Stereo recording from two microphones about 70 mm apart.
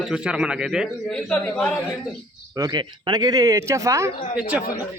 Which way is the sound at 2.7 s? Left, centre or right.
Right.